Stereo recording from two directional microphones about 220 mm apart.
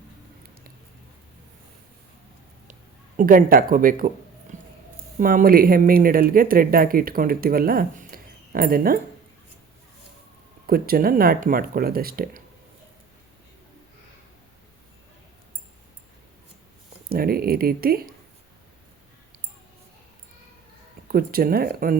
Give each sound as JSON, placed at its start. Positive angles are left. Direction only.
{"t": 3.2, "sound": "speech", "side_deg": -40}
{"t": 4.5, "sound": "a sound", "side_deg": -35}
{"t": 5.2, "sound": "speech", "side_deg": -40}
{"t": 10.7, "sound": "speech", "side_deg": -45}
{"t": 17.1, "sound": "speech", "side_deg": -45}
{"t": 21.1, "sound": "speech", "side_deg": -40}